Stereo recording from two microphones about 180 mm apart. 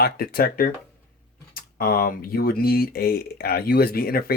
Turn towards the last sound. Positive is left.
turn(degrees=55)  # may be behind; listen again after turning